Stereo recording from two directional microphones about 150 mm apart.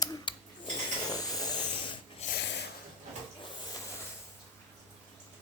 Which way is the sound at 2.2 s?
90° left.